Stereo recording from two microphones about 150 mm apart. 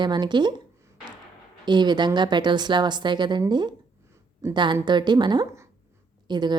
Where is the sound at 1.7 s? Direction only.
30° right (ahead or behind).